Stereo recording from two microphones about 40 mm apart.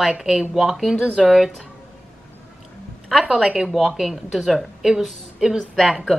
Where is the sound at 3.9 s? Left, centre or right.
Centre.